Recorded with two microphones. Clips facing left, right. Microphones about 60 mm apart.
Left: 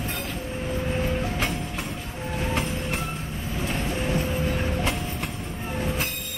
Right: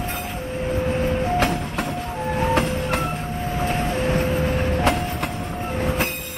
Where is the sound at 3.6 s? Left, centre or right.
Right.